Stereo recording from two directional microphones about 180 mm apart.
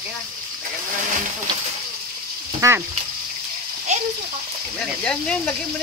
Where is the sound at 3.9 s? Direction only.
40° right (ahead or behind).